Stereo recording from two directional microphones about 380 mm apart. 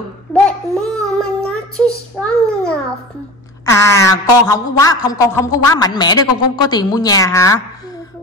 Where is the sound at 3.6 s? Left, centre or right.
Centre.